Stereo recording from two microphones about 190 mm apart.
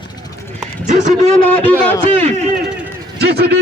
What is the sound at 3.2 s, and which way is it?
Speech, 60° right (ahead or behind).